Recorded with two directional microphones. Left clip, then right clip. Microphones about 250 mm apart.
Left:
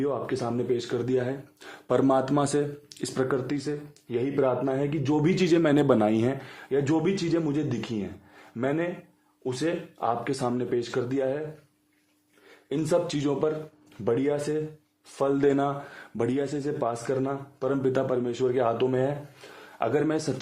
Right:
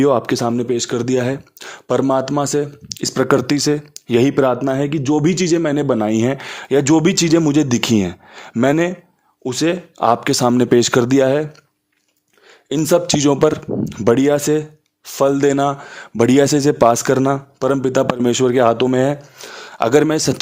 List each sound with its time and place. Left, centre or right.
0.0 s a man's voice: right
12.6 s a man's voice: right